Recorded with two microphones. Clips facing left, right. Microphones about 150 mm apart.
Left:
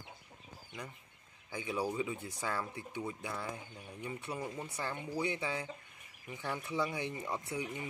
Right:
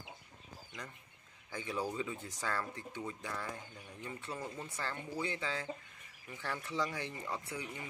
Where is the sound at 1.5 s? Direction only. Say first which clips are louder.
Left 2 dB; 15° left (ahead or behind).